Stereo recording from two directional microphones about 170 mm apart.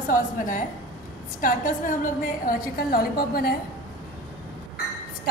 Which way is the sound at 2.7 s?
60° left (ahead or behind).